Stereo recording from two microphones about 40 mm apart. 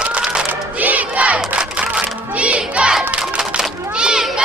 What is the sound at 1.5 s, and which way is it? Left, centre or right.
Music, right.